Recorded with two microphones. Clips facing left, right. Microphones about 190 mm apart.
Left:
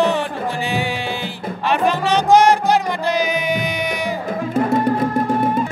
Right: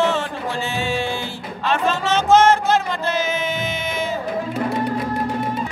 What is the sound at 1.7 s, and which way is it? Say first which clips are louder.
Music: left 3 dB; 15° left (ahead or behind).